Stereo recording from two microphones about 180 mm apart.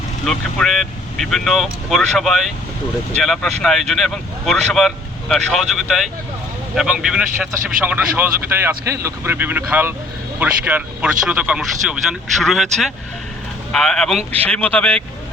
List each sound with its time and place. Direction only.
0.3 s speech: centre (ahead or behind)